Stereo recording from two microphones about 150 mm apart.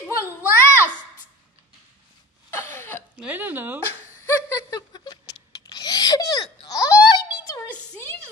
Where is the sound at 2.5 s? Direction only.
15° left (ahead or behind).